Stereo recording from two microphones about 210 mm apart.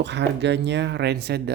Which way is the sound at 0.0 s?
55° right (ahead or behind).